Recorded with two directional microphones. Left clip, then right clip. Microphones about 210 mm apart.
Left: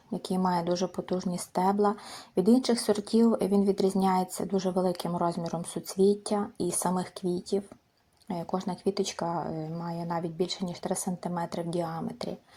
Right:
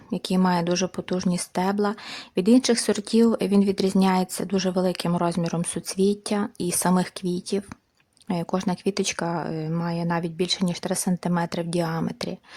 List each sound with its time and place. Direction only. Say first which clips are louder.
0.3 s speech: right 4 dB; 40° right (ahead or behind)